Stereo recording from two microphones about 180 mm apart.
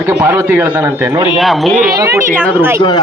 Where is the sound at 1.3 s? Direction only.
Centre (ahead or behind).